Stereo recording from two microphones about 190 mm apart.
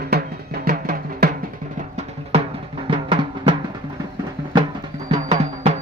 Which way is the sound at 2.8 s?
25° right (ahead or behind).